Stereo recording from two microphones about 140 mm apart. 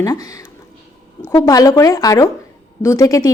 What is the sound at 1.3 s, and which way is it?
A woman's voice, 25° left (ahead or behind).